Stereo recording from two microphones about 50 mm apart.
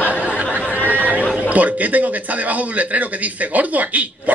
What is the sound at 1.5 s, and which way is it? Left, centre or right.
Speech, right.